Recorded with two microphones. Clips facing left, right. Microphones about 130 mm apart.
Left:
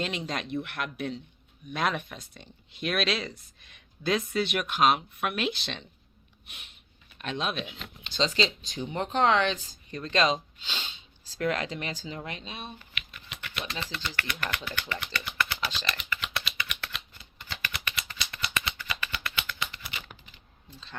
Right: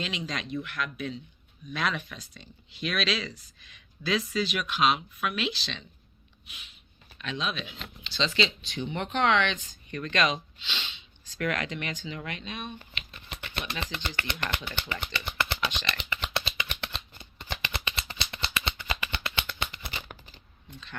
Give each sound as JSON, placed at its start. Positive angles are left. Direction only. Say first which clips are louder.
{"t": 0.3, "sound": "speech", "louder": "left 2 dB", "side_deg": 55}
{"t": 1.7, "sound": "speech", "louder": "left 2 dB", "side_deg": 50}
{"t": 6.5, "sound": "a sound", "louder": "even", "side_deg": 60}
{"t": 7.2, "sound": "speech", "louder": "left 1 dB", "side_deg": 50}
{"t": 8.0, "sound": "shuffling cards", "louder": "left 2 dB", "side_deg": 50}
{"t": 8.4, "sound": "speech", "louder": "even", "side_deg": 40}
{"t": 12.8, "sound": "a sound", "louder": "even", "side_deg": -30}
{"t": 14.2, "sound": "speech", "louder": "even", "side_deg": -25}
{"t": 15.1, "sound": "a sound", "louder": "even", "side_deg": -25}
{"t": 15.9, "sound": "typing", "louder": "even", "side_deg": -25}
{"t": 16.2, "sound": "shuffling cards", "louder": "right 2 dB", "side_deg": -30}